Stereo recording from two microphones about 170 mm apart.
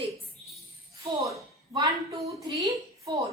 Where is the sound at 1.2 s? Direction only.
20° right (ahead or behind).